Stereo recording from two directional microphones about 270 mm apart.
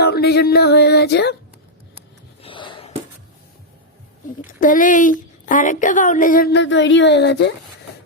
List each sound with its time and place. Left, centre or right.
0.0 s music: left
2.4 s a sound: centre
4.6 s a woman's voice: left